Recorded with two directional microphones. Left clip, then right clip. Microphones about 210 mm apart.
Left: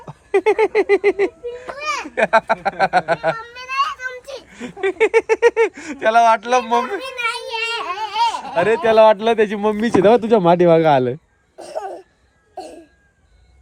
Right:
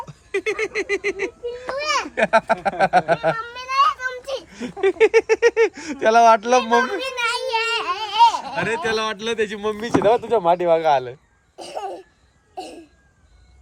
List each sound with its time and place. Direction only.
0.0 s speech: 10° left (ahead or behind); by 4.2 s 30° right (ahead or behind)
4.4 s speech: 10° right (ahead or behind)
8.6 s a man's voice: 20° left (ahead or behind); by 11.1 s 35° left (ahead or behind)
11.7 s laughter: 30° left (ahead or behind)
12.5 s a sound: centre (ahead or behind)